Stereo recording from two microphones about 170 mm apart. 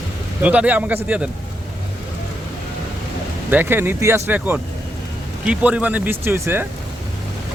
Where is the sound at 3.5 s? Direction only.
10° right (ahead or behind).